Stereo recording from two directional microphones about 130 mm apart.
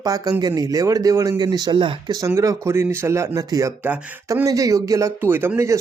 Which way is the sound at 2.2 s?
25° right (ahead or behind).